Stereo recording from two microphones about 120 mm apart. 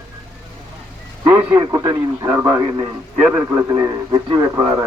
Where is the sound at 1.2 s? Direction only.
25° right (ahead or behind).